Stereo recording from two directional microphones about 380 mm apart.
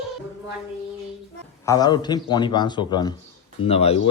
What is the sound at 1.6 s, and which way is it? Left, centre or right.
Speech, centre.